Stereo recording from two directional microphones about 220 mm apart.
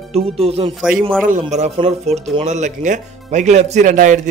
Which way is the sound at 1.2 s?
35° right (ahead or behind).